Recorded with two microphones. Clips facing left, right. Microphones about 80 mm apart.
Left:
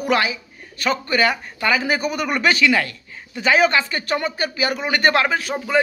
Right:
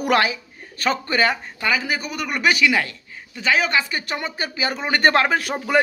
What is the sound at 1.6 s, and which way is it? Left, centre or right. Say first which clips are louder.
Speech: left 5 dB; centre.